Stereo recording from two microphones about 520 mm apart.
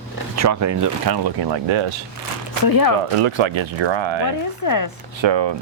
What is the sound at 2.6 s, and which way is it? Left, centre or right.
Speech, left.